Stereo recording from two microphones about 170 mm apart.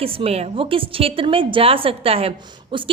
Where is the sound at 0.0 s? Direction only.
35° right (ahead or behind).